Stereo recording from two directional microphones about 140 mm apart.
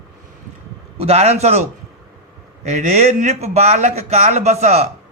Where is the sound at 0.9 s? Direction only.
50° right (ahead or behind).